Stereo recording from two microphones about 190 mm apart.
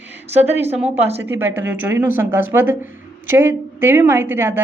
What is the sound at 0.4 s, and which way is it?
Speech, 10° right (ahead or behind).